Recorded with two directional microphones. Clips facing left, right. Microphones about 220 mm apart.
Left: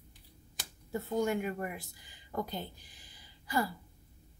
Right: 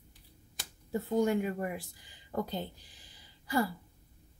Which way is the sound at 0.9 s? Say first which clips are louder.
Right 3 dB; 30° right (ahead or behind).